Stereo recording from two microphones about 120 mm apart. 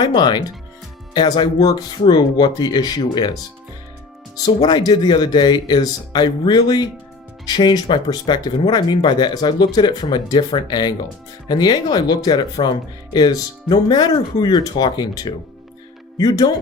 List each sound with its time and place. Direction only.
0.0 s speech: 35° left (ahead or behind)
4.4 s speech: 35° left (ahead or behind)